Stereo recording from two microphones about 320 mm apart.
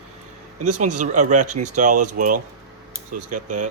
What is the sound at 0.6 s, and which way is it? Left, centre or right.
Speech, right.